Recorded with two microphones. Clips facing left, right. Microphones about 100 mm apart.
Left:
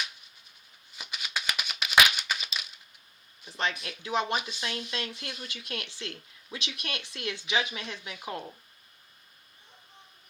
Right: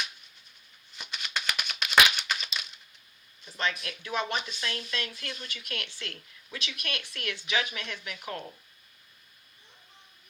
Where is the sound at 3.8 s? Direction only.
25° left (ahead or behind).